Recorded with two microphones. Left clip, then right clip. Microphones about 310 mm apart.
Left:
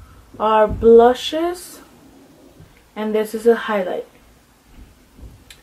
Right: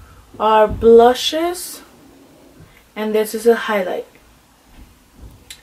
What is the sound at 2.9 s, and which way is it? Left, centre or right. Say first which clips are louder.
A woman's voice: right 2 dB; centre.